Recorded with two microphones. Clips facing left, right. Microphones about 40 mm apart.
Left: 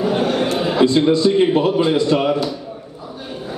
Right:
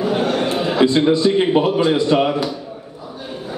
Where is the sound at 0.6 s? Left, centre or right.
Centre.